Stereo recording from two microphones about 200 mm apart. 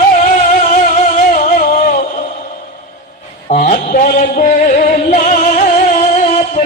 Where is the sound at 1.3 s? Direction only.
40° left (ahead or behind).